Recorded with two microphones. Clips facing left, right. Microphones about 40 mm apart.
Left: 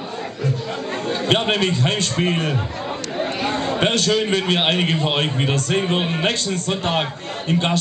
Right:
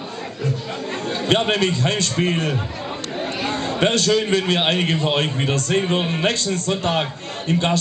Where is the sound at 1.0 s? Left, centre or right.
Centre.